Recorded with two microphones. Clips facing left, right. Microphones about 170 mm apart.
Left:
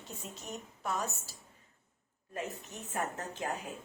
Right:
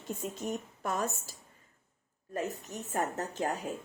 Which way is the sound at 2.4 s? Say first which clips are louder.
Right 5 dB; 40° right (ahead or behind).